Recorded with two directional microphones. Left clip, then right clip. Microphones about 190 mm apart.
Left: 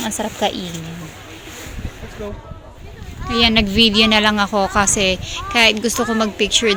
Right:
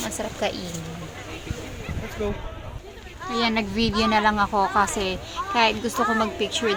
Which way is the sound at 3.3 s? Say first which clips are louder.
Left 9 dB; 20° left (ahead or behind).